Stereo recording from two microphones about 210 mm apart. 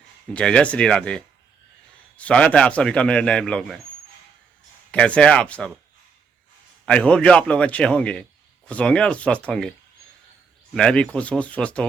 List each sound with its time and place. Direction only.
0.3 s speech: 5° left (ahead or behind)
4.9 s speech: 5° left (ahead or behind)
6.8 s speech: 5° left (ahead or behind)
10.8 s speech: 5° left (ahead or behind)